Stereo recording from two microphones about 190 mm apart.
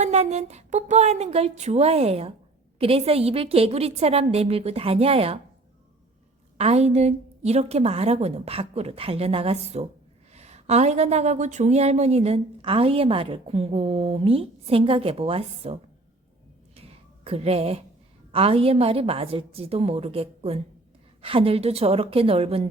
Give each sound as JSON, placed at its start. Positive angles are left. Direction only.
{"t": 0.0, "sound": "speech", "side_deg": -35}
{"t": 6.6, "sound": "speech", "side_deg": -35}
{"t": 16.7, "sound": "cat", "side_deg": -30}
{"t": 18.3, "sound": "speech", "side_deg": -30}